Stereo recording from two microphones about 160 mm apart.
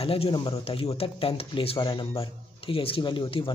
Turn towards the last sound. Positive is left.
turn(degrees=35)  # may be behind; listen again after turning